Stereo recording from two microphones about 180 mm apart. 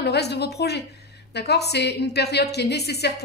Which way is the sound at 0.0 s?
65° left (ahead or behind).